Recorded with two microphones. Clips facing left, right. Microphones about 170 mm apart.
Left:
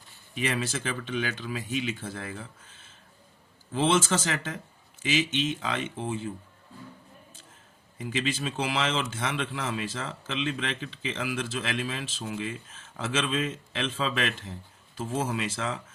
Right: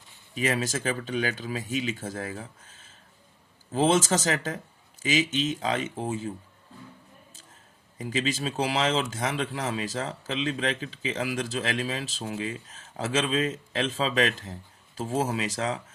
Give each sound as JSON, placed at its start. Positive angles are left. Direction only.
{"t": 0.3, "sound": "speech", "side_deg": -40}
{"t": 7.9, "sound": "speech", "side_deg": -40}